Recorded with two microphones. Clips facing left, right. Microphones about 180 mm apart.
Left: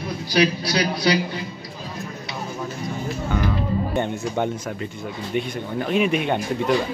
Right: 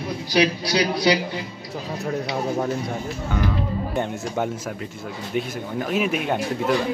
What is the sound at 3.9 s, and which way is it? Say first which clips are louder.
Speech: left 2 dB; centre (ahead or behind).